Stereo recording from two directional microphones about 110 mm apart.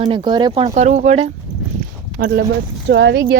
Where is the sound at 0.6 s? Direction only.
90° right.